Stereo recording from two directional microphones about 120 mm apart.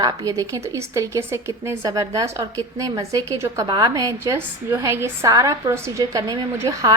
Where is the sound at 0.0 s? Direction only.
30° right (ahead or behind).